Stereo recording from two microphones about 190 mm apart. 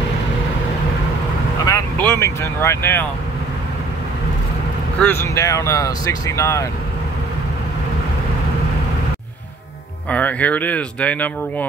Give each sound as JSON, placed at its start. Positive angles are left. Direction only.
{"t": 1.7, "sound": "speech", "side_deg": 10}
{"t": 5.0, "sound": "speech", "side_deg": 15}
{"t": 10.0, "sound": "speech", "side_deg": 10}